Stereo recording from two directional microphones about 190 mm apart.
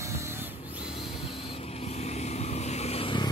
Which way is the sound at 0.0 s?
15° right (ahead or behind).